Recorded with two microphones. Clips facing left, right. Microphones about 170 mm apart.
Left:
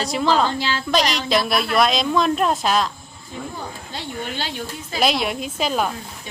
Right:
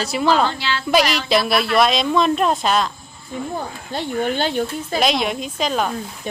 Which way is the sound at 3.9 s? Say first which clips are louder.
Right 8 dB; 50° right (ahead or behind).